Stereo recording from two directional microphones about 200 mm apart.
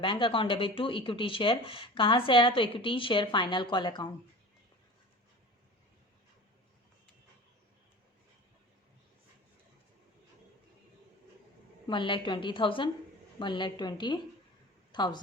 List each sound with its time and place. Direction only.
0.0 s speech: 25° left (ahead or behind)
11.9 s a woman's voice: 25° left (ahead or behind)